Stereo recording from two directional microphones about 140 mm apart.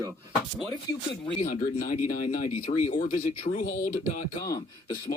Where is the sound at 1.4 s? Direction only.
65° left (ahead or behind).